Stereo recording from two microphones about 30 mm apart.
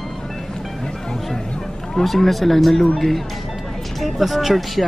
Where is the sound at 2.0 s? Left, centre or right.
Centre.